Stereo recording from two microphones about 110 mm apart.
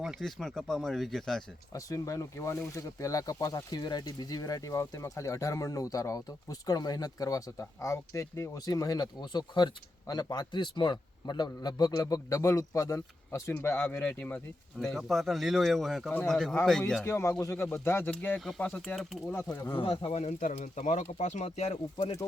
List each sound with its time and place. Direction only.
0.2 s speech: 5° left (ahead or behind)
1.7 s speech: 30° left (ahead or behind)
13.5 s speech: 20° left (ahead or behind)
14.9 s speech: centre (ahead or behind)
17.0 s speech: 20° left (ahead or behind)
18.3 s speech: centre (ahead or behind)
18.6 s speech: 15° left (ahead or behind)
19.5 s speech: 35° left (ahead or behind)
19.8 s speech: 50° left (ahead or behind)
20.1 s speech: 75° left (ahead or behind)